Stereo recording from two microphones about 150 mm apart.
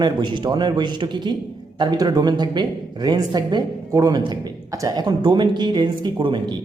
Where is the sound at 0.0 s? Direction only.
30° right (ahead or behind).